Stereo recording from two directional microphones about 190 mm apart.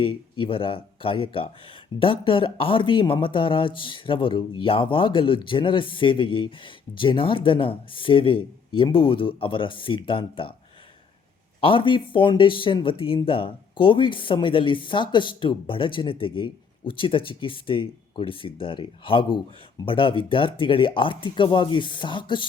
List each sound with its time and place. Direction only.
0.0 s speech: 25° left (ahead or behind)
11.6 s speech: 25° left (ahead or behind)